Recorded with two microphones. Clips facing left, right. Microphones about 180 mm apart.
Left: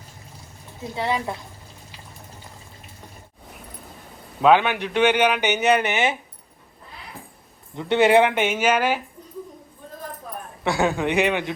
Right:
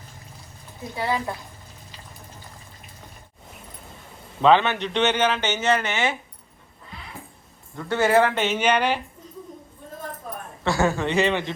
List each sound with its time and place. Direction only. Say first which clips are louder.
0.9 s speech: left 1 dB; 25° left (ahead or behind)
4.4 s speech: left 1 dB; 10° left (ahead or behind)
7.8 s speech: left 3 dB; 20° left (ahead or behind)
8.4 s speech: left 1 dB; 10° left (ahead or behind)
10.6 s speech: left 1 dB; 15° left (ahead or behind)